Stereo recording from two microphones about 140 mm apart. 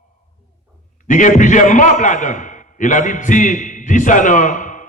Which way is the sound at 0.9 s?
65° left (ahead or behind).